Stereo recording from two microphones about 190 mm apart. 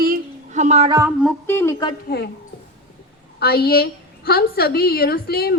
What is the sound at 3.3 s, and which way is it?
A woman's voice, 55° left (ahead or behind).